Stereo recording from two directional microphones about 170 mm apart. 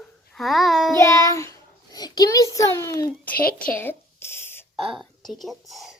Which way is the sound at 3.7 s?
10° left (ahead or behind).